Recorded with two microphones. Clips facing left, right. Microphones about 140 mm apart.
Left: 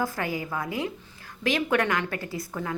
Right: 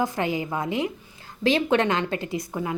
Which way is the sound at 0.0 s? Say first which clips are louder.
Right 4 dB; 20° right (ahead or behind).